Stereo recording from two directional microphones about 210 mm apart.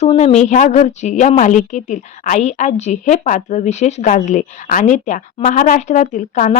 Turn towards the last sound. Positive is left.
turn(degrees=35)  # may be behind; listen again after turning